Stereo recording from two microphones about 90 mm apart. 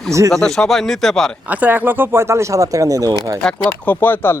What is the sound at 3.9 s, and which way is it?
Speech, 20° left (ahead or behind).